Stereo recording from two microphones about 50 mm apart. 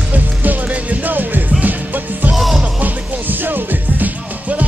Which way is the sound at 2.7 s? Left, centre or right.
Right.